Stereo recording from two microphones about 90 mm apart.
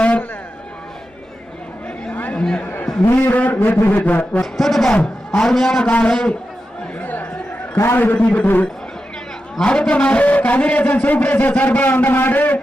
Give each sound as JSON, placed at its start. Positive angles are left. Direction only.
{"t": 0.0, "sound": "a sound", "side_deg": 15}
{"t": 2.0, "sound": "chatter", "side_deg": 15}
{"t": 3.2, "sound": "a man's voice", "side_deg": 15}
{"t": 4.5, "sound": "a man's voice", "side_deg": 0}
{"t": 7.0, "sound": "chatter", "side_deg": 20}
{"t": 7.8, "sound": "a man's voice", "side_deg": 25}